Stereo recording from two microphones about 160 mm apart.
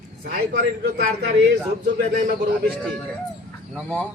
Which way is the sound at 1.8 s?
70° right (ahead or behind).